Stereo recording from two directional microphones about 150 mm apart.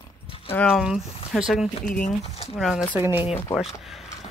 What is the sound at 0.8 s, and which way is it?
Speech, 5° right (ahead or behind).